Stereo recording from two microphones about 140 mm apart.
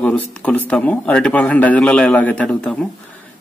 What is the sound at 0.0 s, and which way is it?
A man's voice, 10° left (ahead or behind).